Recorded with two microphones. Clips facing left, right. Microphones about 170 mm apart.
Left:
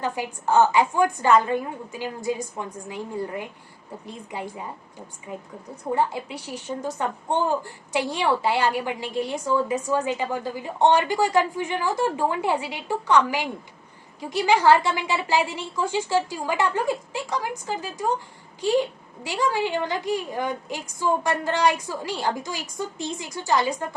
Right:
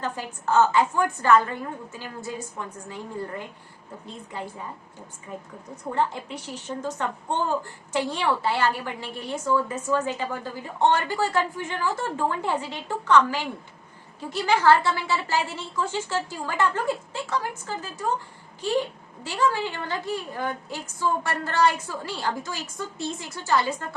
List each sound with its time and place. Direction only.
0.0 s a woman's voice: 15° left (ahead or behind)